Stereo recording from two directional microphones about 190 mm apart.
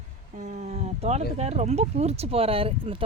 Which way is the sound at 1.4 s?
35° right (ahead or behind).